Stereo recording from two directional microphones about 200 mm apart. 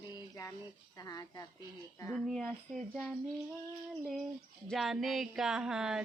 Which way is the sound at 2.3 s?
Centre (ahead or behind).